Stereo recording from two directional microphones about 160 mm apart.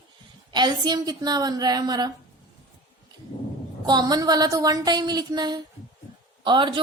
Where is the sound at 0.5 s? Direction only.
25° right (ahead or behind).